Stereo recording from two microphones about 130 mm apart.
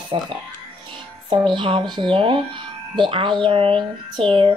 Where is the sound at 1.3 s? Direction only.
35° right (ahead or behind).